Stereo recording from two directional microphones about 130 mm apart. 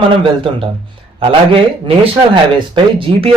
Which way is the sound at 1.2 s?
45° right (ahead or behind).